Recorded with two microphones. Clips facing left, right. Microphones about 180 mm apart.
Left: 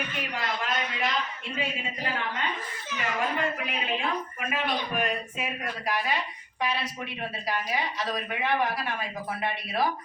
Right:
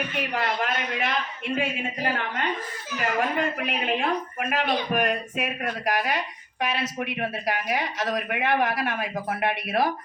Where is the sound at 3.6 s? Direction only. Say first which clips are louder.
Right 4 dB; 60° right (ahead or behind).